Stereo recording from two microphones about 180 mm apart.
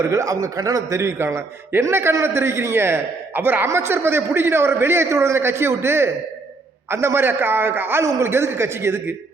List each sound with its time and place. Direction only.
0.0 s a man's voice: 20° right (ahead or behind)